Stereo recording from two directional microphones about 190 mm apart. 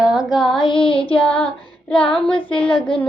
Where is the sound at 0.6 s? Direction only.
25° left (ahead or behind).